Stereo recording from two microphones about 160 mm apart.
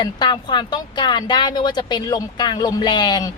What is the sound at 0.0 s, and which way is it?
A woman's voice, 30° left (ahead or behind).